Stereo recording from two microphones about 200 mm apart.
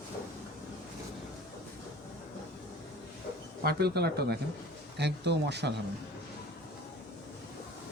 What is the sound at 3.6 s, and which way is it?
Speech, 55° right (ahead or behind).